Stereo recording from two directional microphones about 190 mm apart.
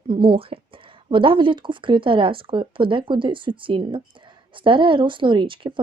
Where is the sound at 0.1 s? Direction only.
25° right (ahead or behind).